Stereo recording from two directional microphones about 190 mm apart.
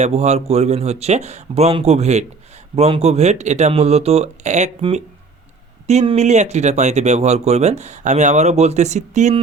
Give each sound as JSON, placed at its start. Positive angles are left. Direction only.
{"t": 0.0, "sound": "speech", "side_deg": -35}